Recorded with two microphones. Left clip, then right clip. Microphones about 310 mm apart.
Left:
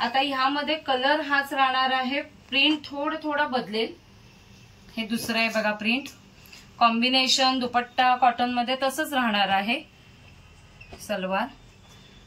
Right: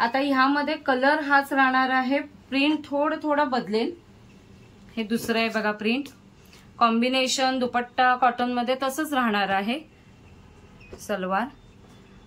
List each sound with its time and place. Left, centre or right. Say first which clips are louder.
0.0 s a woman's voice: right 2 dB; centre
4.9 s a woman's voice: right 1 dB; centre
11.1 s a woman's voice: right 1 dB; centre